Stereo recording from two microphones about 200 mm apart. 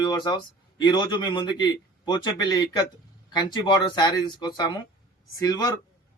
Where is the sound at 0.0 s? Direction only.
20° left (ahead or behind).